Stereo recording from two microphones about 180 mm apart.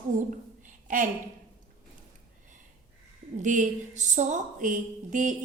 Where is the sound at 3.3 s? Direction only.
45° right (ahead or behind).